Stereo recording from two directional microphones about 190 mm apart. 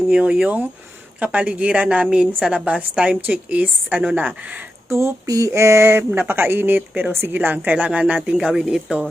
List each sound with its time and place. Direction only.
0.1 s a woman's voice: 5° right (ahead or behind)